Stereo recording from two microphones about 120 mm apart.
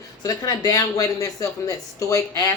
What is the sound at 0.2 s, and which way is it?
Speech, 30° left (ahead or behind).